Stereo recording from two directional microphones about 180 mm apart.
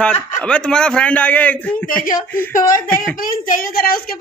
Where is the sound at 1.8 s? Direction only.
50° left (ahead or behind).